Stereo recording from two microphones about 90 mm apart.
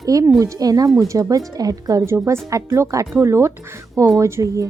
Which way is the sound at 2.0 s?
30° right (ahead or behind).